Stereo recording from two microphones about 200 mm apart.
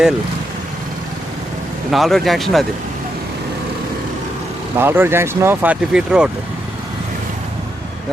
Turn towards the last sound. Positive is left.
turn(degrees=-5)  # may be behind; listen again after turning